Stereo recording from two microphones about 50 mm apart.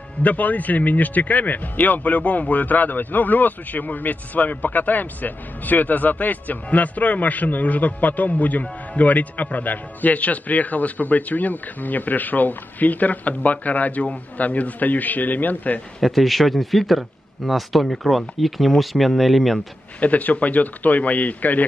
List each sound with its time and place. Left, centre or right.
0.2 s speech: left
16.0 s speech: centre
20.0 s speech: left